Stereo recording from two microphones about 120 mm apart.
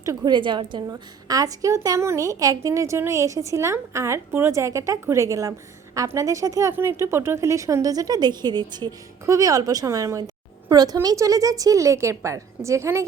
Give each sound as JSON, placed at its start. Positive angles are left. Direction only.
{"t": 0.0, "sound": "a woman's voice", "side_deg": -25}
{"t": 0.3, "sound": "a woman's voice", "side_deg": -40}